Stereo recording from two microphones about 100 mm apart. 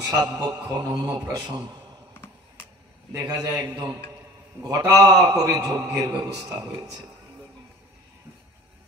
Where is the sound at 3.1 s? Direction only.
40° right (ahead or behind).